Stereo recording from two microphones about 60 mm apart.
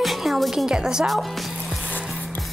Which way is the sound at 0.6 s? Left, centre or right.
Centre.